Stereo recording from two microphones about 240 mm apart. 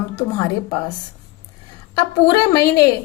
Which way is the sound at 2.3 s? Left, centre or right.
Centre.